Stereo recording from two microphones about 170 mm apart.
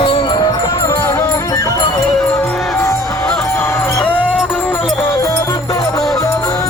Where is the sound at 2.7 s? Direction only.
15° left (ahead or behind).